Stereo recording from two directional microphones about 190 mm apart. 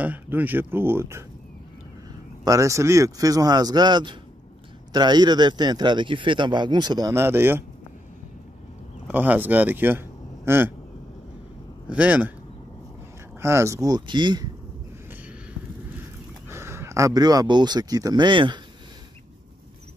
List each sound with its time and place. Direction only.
0.0 s speech: 10° right (ahead or behind)
2.4 s speech: 15° right (ahead or behind)
9.0 s speech: 10° right (ahead or behind)
11.9 s speech: 5° right (ahead or behind)
13.4 s speech: 15° right (ahead or behind)
16.4 s speech: 15° right (ahead or behind)